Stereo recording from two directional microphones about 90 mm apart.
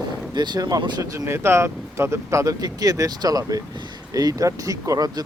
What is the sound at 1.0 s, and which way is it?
Speech, 30° right (ahead or behind).